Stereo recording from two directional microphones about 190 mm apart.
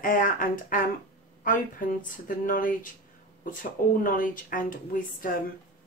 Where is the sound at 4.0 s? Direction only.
45° left (ahead or behind).